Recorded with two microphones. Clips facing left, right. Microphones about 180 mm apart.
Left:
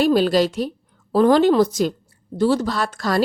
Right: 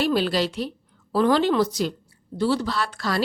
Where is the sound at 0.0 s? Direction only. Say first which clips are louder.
Left 6 dB; 45° left (ahead or behind).